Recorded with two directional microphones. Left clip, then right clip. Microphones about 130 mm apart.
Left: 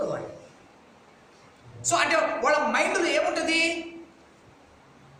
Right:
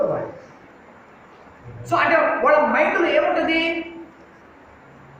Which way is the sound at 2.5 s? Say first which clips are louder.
Right 7 dB; 25° left (ahead or behind).